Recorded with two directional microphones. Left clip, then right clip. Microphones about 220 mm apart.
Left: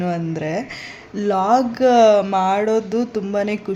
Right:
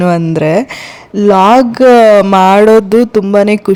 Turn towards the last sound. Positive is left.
turn(degrees=-40)  # may be behind; listen again after turning